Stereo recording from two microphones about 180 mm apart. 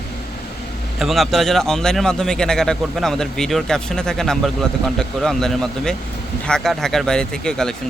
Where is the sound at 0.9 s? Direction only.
Centre (ahead or behind).